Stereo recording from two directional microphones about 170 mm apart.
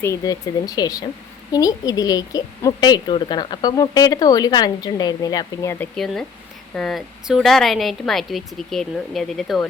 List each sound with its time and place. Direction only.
0.0 s speech: 20° left (ahead or behind)
5.8 s speech: 5° left (ahead or behind)